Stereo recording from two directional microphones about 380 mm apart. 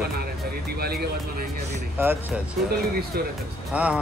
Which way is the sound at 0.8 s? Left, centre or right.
Right.